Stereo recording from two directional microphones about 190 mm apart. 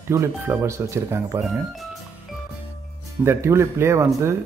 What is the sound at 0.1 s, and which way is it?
Speech, 15° right (ahead or behind).